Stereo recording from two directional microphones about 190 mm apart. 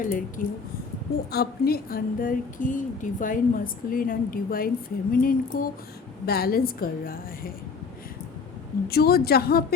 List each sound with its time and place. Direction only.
0.0 s speech: 45° left (ahead or behind)
8.9 s a woman's voice: 55° left (ahead or behind)